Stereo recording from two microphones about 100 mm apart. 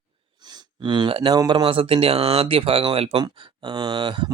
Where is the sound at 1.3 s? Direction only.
45° right (ahead or behind); by 3.2 s 70° right (ahead or behind).